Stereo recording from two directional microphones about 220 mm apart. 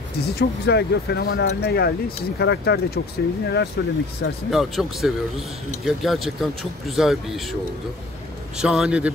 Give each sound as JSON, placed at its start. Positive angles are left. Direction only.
{"t": 0.2, "sound": "speech", "side_deg": 45}
{"t": 4.5, "sound": "speech", "side_deg": 0}
{"t": 8.5, "sound": "speech", "side_deg": -5}